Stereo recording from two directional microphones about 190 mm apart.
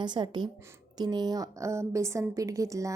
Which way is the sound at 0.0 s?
25° right (ahead or behind).